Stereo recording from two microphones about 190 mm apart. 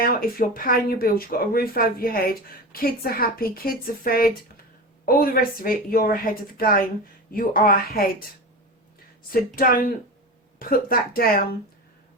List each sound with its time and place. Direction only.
0.0 s speech: 50° left (ahead or behind)
9.6 s speech: 50° left (ahead or behind)